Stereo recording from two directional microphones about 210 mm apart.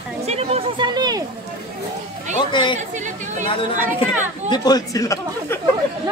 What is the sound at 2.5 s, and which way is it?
Speech, 20° left (ahead or behind).